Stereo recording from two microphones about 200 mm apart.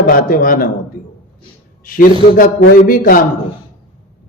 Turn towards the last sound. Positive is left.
turn(degrees=45)  # may be behind; listen again after turning